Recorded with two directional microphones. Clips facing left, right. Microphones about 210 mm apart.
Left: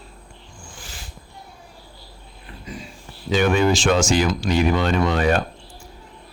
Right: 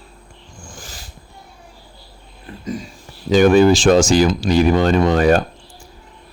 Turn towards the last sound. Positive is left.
turn(degrees=-35)  # may be behind; listen again after turning